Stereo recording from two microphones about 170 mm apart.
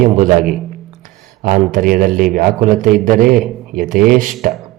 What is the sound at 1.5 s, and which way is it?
A man's voice, 55° right (ahead or behind).